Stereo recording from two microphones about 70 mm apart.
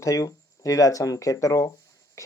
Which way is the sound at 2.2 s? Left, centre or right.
Left.